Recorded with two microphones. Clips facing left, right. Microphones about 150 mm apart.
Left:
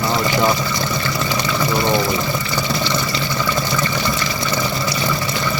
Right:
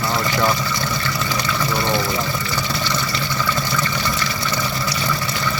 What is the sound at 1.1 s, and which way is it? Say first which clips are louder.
Water: left 4 dB; 20° left (ahead or behind).